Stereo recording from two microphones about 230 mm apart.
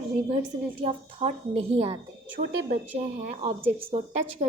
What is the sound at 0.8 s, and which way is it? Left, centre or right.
A woman's voice, right.